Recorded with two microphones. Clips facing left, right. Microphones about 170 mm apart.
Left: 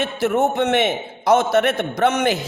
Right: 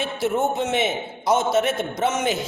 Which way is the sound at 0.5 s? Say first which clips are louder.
Left 4 dB; 65° left (ahead or behind).